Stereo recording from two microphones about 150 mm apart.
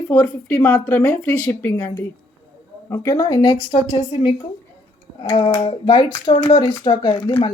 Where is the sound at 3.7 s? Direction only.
40° left (ahead or behind).